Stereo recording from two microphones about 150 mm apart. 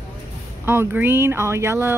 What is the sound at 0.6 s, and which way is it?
Speech, 15° right (ahead or behind).